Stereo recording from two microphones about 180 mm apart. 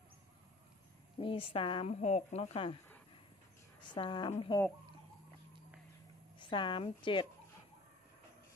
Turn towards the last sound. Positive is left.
turn(degrees=25)  # may be behind; listen again after turning